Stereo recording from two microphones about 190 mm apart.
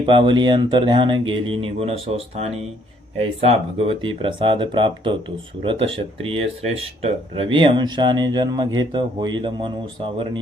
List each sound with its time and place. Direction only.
0.0 s speech: 25° right (ahead or behind)